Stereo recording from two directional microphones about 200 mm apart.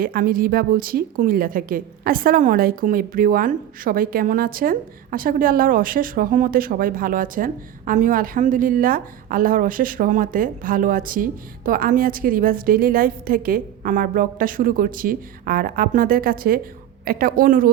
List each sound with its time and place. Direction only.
0.0 s a woman's voice: 45° right (ahead or behind)